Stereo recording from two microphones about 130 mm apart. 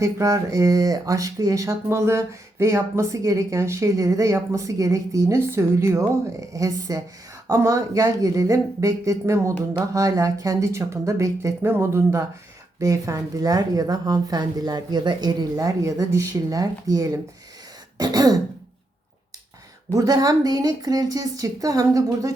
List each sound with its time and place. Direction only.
0.0 s speech: 25° right (ahead or behind)
17.9 s throat clearing: 30° right (ahead or behind)
19.9 s speech: 30° right (ahead or behind)